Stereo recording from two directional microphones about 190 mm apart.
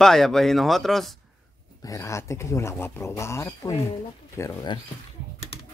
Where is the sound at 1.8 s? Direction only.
15° left (ahead or behind).